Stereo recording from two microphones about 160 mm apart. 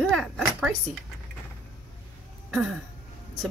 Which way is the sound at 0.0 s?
Centre (ahead or behind).